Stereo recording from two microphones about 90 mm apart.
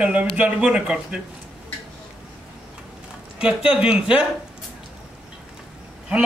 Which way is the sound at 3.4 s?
10° right (ahead or behind).